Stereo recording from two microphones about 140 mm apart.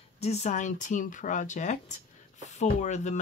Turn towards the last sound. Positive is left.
turn(degrees=55)  # may be behind; listen again after turning